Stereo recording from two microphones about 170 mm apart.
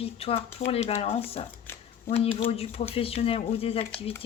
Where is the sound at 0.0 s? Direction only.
35° left (ahead or behind).